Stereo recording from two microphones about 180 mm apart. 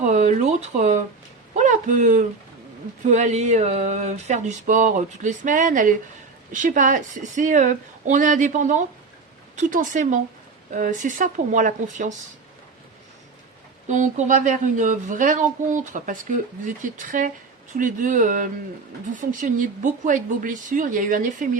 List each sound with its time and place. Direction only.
0.0 s speech: 45° right (ahead or behind)
1.5 s a sound: 45° right (ahead or behind)
6.5 s speech: 45° right (ahead or behind)
13.8 s speech: 40° right (ahead or behind)